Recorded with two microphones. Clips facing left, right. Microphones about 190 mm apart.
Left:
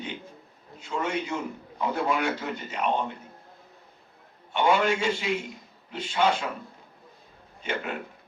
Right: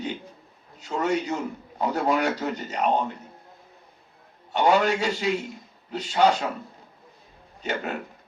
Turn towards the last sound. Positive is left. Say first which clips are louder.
# right 2 dB
turn(degrees=-40)  # may be behind; listen again after turning